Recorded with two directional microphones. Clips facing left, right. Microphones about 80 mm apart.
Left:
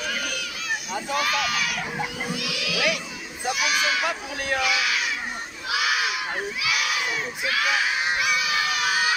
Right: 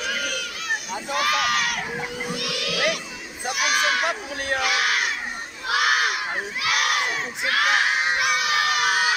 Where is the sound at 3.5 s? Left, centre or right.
Right.